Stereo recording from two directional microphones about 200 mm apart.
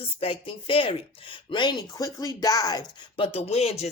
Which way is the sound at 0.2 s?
25° left (ahead or behind).